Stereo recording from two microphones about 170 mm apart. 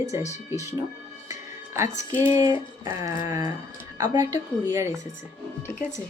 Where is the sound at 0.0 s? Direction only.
45° left (ahead or behind).